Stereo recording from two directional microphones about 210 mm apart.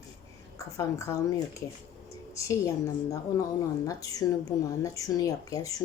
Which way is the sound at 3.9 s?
15° left (ahead or behind).